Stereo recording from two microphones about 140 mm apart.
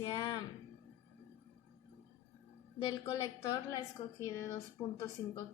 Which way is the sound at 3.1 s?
25° left (ahead or behind).